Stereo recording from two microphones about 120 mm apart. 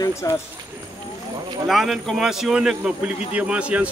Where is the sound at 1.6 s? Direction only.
Centre (ahead or behind).